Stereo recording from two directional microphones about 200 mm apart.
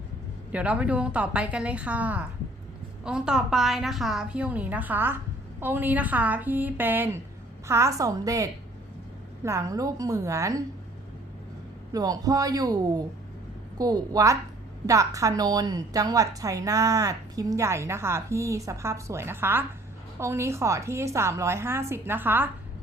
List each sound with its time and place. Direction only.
0.5 s a woman's voice: 5° right (ahead or behind)
11.9 s a man's voice: 20° right (ahead or behind)